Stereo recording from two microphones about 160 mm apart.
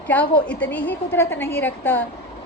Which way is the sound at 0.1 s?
10° left (ahead or behind).